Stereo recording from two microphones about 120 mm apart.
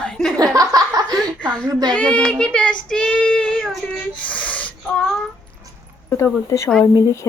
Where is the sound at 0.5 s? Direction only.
30° right (ahead or behind).